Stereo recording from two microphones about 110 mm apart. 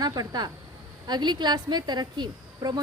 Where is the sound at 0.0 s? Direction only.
40° right (ahead or behind).